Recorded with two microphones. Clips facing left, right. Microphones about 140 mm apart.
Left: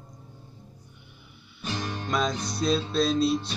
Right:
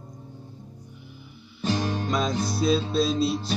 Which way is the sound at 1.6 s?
45° right (ahead or behind).